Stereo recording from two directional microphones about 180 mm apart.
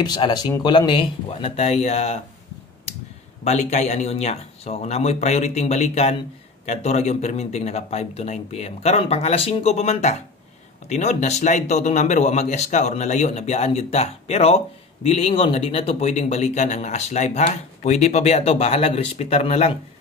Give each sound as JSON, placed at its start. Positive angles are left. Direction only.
{"t": 0.0, "sound": "speech", "side_deg": 25}
{"t": 3.4, "sound": "a man's voice", "side_deg": 40}